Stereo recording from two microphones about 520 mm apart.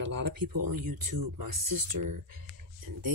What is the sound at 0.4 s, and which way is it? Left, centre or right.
Speech, right.